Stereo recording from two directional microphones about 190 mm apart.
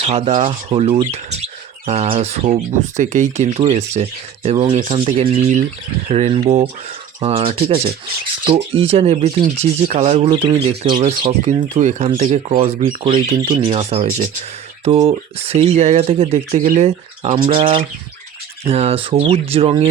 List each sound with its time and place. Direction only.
0.0 s speech: 35° right (ahead or behind)